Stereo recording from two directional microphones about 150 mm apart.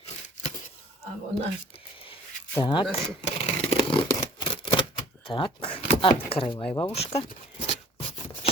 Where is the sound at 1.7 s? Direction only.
40° left (ahead or behind).